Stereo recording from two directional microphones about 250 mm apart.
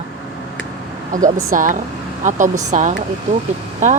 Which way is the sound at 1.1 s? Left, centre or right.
Right.